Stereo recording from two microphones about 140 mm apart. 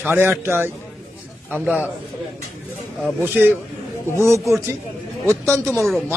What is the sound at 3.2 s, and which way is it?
Speech, 15° right (ahead or behind).